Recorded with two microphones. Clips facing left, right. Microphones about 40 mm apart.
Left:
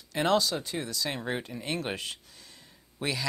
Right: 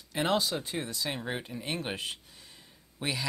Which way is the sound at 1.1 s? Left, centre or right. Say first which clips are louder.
Left 2 dB; centre.